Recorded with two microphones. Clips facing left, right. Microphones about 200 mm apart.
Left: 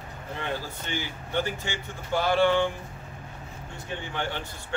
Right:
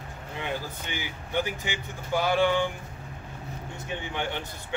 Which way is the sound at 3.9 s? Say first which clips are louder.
Even; 15° right (ahead or behind).